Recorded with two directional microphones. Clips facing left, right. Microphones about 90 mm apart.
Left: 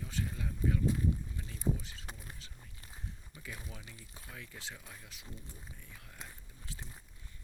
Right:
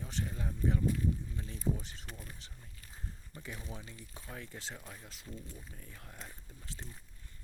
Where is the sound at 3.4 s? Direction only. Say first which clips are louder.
Right 2 dB; 30° right (ahead or behind).